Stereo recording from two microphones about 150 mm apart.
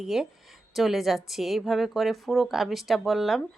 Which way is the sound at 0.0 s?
5° right (ahead or behind).